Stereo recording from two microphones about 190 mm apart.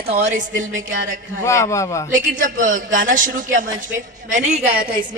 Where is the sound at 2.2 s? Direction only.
45° right (ahead or behind).